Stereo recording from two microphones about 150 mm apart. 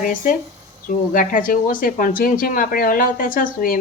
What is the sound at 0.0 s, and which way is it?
Speech, 65° left (ahead or behind).